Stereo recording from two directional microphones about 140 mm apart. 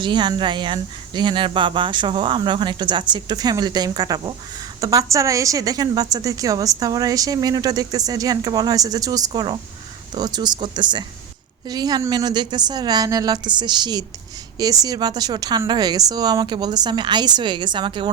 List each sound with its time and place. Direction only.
0.0 s a woman's voice: 35° right (ahead or behind)